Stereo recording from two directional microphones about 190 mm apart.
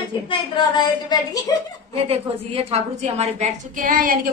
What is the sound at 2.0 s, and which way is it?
A woman's voice, 30° right (ahead or behind).